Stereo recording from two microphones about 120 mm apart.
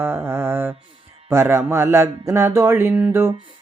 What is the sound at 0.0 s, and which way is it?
Mantra, 15° right (ahead or behind).